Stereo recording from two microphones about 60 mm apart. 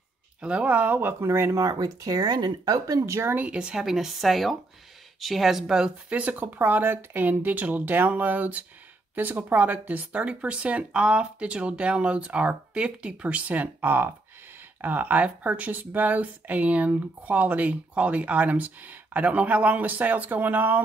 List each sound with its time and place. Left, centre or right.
0.4 s speech: right
1.5 s speech: right
3.3 s speech: centre
6.0 s speech: right